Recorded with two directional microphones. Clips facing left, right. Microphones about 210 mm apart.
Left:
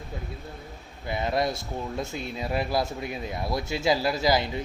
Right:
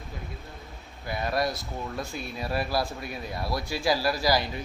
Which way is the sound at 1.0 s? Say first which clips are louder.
Left 2 dB; 20° left (ahead or behind).